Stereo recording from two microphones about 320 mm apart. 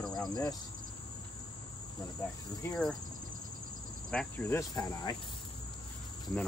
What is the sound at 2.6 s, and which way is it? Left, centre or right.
Cricket, centre.